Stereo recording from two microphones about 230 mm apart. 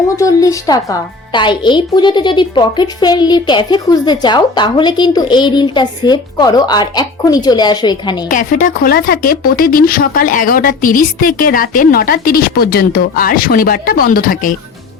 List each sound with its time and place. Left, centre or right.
0.2 s speech: centre
8.3 s speech: left